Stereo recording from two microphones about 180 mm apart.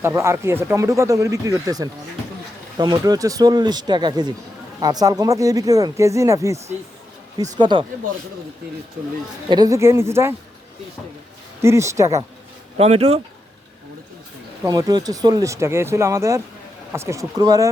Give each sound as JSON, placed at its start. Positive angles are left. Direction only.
{"t": 0.0, "sound": "speech", "side_deg": -15}
{"t": 9.5, "sound": "speech", "side_deg": -20}
{"t": 11.6, "sound": "speech", "side_deg": -15}
{"t": 12.7, "sound": "speech", "side_deg": -35}
{"t": 14.6, "sound": "speech", "side_deg": -20}